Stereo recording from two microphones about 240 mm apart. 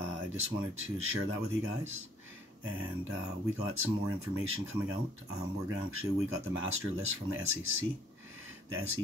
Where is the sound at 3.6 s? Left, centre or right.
Right.